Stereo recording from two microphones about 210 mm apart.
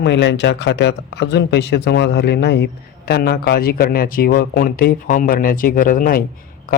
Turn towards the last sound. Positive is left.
turn(degrees=40)  # may be behind; listen again after turning